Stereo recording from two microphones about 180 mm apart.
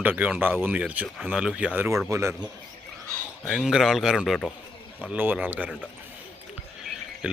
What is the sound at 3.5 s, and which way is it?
A man's voice, 5° right (ahead or behind).